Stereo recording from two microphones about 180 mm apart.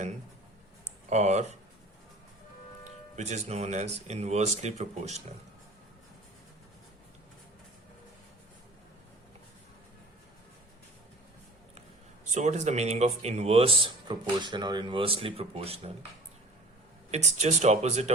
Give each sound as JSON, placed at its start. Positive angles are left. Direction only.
{"t": 1.1, "sound": "a man's voice", "side_deg": -40}
{"t": 3.2, "sound": "a man's voice", "side_deg": -40}
{"t": 12.2, "sound": "a man's voice", "side_deg": -40}
{"t": 17.1, "sound": "a man's voice", "side_deg": -40}